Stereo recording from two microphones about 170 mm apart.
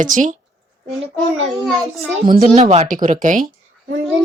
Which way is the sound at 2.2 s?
40° right (ahead or behind).